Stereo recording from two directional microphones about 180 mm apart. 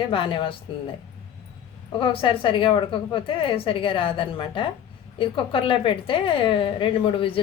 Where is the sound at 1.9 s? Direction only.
30° left (ahead or behind).